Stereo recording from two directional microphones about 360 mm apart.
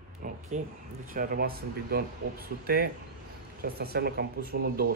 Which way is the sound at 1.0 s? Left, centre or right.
Right.